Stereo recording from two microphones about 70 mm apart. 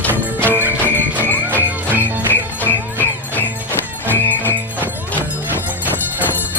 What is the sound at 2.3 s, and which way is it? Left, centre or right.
Jingle bell, left.